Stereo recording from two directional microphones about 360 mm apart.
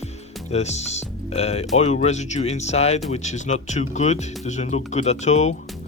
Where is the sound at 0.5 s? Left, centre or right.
Centre.